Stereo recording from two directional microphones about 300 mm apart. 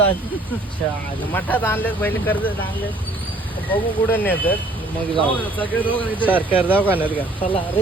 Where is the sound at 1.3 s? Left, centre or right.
Centre.